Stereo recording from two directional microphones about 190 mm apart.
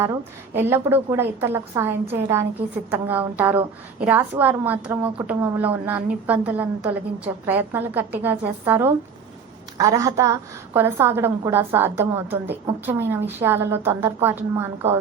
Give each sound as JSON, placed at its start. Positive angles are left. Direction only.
{"t": 0.0, "sound": "a woman's voice", "side_deg": -10}